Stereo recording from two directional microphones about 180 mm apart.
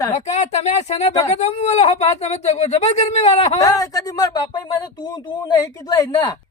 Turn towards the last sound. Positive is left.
turn(degrees=20)  # may be behind; listen again after turning